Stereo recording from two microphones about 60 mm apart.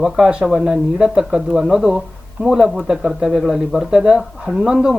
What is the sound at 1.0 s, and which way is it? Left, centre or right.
Speech, centre.